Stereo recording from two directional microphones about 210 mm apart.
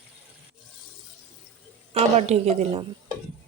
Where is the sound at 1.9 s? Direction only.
30° right (ahead or behind).